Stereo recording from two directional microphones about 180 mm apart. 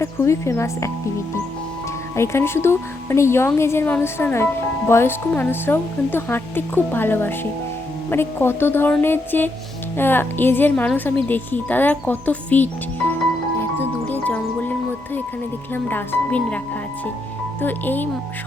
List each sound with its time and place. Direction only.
0.0 s a woman's voice: 15° left (ahead or behind)
2.1 s a woman's voice: 15° left (ahead or behind)
13.6 s music: 10° left (ahead or behind)
15.7 s a woman's voice: 10° left (ahead or behind)
17.6 s a woman's voice: 10° left (ahead or behind)